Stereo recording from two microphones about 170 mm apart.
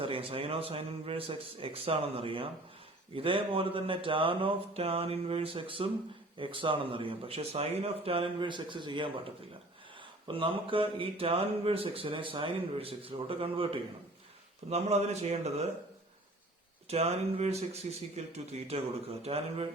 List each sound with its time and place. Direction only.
0.0 s speech: 30° right (ahead or behind)
16.9 s speech: 40° right (ahead or behind)